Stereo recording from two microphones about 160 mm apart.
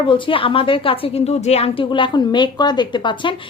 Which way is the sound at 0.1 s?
30° left (ahead or behind).